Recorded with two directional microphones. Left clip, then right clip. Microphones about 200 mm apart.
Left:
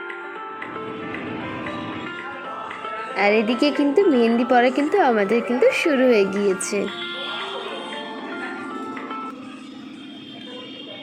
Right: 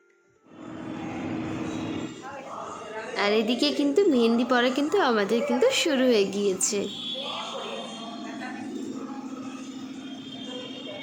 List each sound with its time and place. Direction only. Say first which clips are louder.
3.3 s a woman's voice: left 5 dB; 30° right (ahead or behind)
3.8 s a woman's voice: left 4 dB; 15° left (ahead or behind)